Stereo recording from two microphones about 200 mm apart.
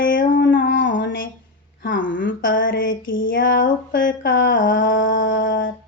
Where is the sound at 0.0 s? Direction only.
45° left (ahead or behind).